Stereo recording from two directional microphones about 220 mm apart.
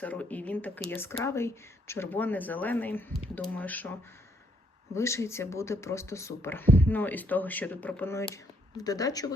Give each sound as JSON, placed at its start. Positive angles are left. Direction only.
{"t": 0.0, "sound": "speech", "side_deg": 5}
{"t": 4.9, "sound": "speech", "side_deg": 15}